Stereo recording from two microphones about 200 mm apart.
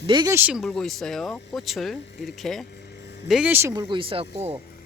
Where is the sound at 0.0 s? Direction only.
20° right (ahead or behind).